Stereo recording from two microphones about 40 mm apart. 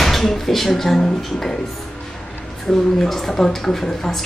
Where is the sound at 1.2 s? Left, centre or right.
Centre.